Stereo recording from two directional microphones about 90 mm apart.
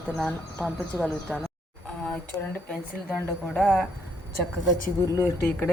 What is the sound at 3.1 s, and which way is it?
Speech, 5° right (ahead or behind).